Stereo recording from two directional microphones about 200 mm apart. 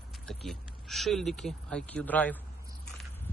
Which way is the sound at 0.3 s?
Centre (ahead or behind).